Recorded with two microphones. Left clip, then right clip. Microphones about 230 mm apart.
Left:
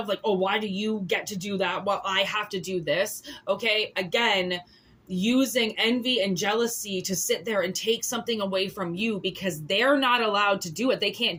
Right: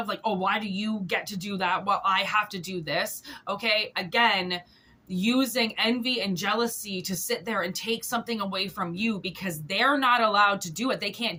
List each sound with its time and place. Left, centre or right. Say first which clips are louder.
0.1 s a woman's voice: left 2 dB; centre